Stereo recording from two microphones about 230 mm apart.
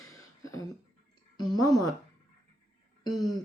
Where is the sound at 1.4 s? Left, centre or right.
Centre.